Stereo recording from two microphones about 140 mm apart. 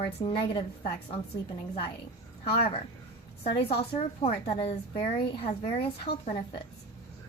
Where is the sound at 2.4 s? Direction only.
40° left (ahead or behind).